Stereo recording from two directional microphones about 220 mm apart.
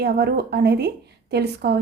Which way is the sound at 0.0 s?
45° right (ahead or behind).